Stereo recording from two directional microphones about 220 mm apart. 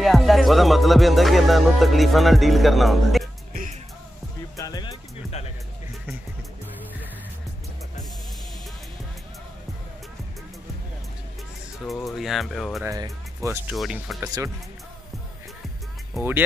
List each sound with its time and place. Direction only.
0.0 s music: centre (ahead or behind)
4.6 s music: 15° left (ahead or behind)
11.9 s speech: centre (ahead or behind)
12.8 s speech: 15° right (ahead or behind)
16.1 s speech: 5° right (ahead or behind)